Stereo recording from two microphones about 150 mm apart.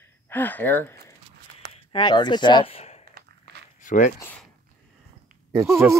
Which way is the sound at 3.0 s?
90° right.